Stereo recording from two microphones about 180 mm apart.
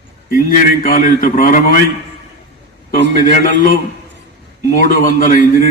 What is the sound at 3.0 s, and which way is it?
A man's voice, 45° left (ahead or behind).